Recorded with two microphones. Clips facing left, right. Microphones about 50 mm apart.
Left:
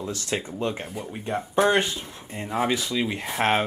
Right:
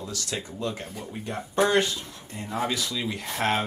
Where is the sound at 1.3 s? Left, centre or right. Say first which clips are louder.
Left 2 dB; centre.